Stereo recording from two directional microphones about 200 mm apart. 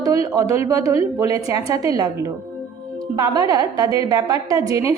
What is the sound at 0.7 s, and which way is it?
A woman's voice, 15° right (ahead or behind).